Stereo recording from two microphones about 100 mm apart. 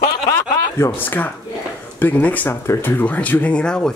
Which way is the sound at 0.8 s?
20° left (ahead or behind).